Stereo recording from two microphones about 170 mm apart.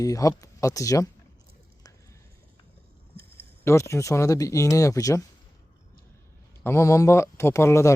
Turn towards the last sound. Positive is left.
turn(degrees=15)  # may be behind; listen again after turning